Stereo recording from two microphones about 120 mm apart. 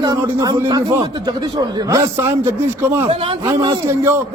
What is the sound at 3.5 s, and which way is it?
Speech, 30° right (ahead or behind).